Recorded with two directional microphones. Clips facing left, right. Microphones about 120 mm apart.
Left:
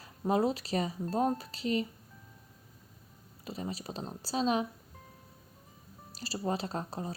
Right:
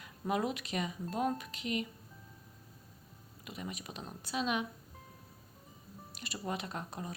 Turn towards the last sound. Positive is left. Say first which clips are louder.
# left 5 dB
turn(degrees=30)  # may be behind; listen again after turning